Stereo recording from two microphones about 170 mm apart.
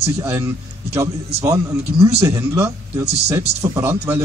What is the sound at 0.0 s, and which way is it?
A man's voice, 15° right (ahead or behind).